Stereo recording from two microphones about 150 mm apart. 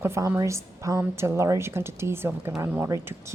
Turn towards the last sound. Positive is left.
turn(degrees=-20)  # may be behind; listen again after turning